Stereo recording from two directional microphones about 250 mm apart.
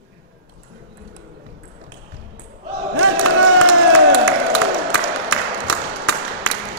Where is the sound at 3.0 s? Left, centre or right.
Right.